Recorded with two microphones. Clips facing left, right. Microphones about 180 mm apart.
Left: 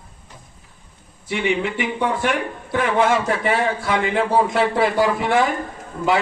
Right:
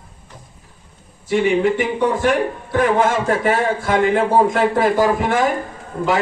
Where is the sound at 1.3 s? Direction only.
40° right (ahead or behind).